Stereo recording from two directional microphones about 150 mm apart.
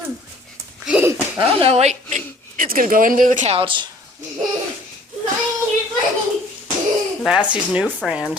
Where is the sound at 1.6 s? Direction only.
45° right (ahead or behind).